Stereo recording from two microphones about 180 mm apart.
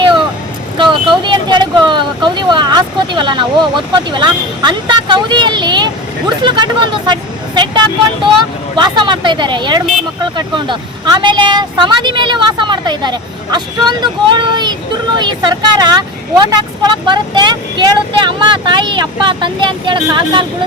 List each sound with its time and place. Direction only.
0.8 s speech: 25° right (ahead or behind)